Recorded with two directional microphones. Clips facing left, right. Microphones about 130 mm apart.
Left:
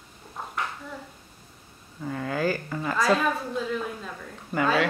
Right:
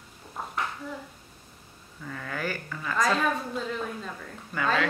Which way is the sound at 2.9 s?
5° left (ahead or behind).